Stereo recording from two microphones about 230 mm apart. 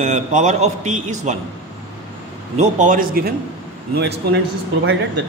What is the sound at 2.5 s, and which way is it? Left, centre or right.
Speech, right.